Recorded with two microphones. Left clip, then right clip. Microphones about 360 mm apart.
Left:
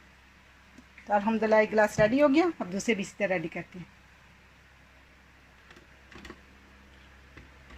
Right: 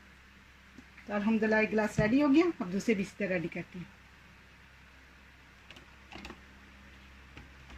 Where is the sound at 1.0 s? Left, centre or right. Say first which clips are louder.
Left 5 dB; left.